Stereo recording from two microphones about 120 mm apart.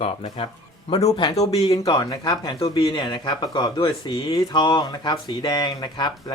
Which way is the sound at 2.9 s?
40° left (ahead or behind).